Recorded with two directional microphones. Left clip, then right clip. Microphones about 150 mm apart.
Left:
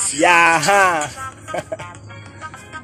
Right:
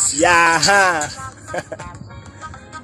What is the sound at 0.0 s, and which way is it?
Speech, centre (ahead or behind).